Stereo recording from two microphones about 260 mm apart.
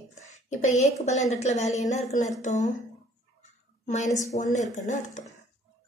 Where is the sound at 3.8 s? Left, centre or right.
Left.